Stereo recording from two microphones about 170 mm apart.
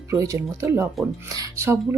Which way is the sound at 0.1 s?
15° right (ahead or behind).